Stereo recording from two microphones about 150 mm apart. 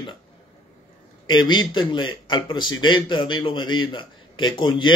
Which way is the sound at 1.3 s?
30° left (ahead or behind).